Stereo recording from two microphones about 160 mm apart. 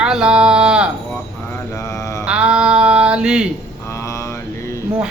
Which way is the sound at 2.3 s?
5° right (ahead or behind).